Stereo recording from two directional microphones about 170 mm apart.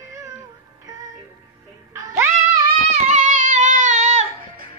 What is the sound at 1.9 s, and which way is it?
Music, 20° right (ahead or behind).